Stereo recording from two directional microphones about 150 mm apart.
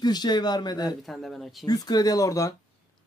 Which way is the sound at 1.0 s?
Centre (ahead or behind).